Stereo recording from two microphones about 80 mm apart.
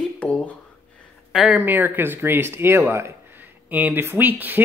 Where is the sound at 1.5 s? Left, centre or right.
Right.